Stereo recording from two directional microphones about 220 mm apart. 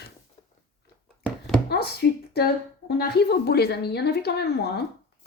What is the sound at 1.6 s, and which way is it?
Speech, 45° left (ahead or behind).